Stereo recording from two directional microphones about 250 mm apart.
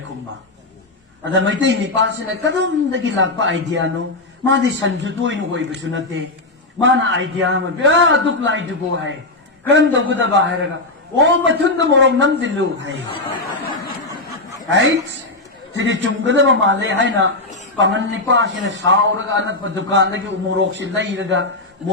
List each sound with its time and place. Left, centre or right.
1.2 s speech: right
9.6 s speech: right
14.7 s speech: right